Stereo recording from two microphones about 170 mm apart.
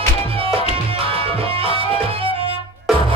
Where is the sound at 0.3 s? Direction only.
35° right (ahead or behind).